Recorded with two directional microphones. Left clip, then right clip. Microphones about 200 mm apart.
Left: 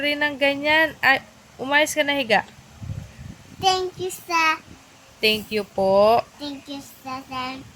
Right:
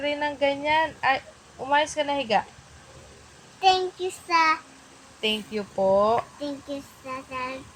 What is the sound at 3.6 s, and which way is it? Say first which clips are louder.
Child singing: even; 20° left (ahead or behind).